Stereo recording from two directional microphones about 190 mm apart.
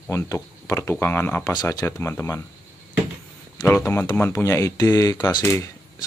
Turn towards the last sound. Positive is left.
turn(degrees=15)  # may be behind; listen again after turning